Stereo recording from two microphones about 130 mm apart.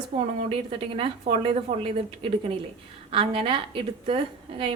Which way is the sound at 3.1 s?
45° right (ahead or behind).